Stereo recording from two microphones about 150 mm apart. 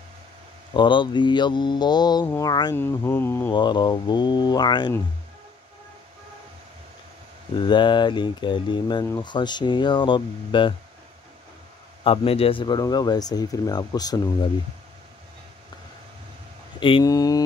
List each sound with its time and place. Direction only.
0.7 s speech: 30° left (ahead or behind); by 3.5 s 15° left (ahead or behind)
3.5 s speech: 30° left (ahead or behind)
7.5 s speech: 30° left (ahead or behind)
12.0 s speech: 40° left (ahead or behind)
17.0 s speech: 25° left (ahead or behind)